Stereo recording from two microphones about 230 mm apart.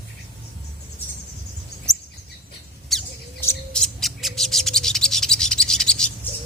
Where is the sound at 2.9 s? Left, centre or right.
Centre.